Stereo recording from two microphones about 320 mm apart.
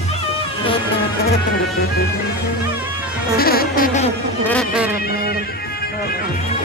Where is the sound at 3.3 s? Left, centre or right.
Left.